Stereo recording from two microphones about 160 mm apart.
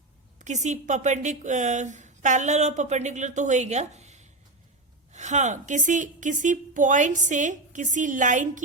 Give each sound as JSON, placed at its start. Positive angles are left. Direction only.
{"t": 0.3, "sound": "speech", "side_deg": -45}